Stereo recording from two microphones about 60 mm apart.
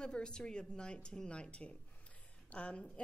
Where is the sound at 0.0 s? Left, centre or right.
Centre.